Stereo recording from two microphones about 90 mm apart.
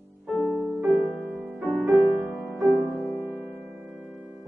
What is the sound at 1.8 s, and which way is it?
Music, centre (ahead or behind).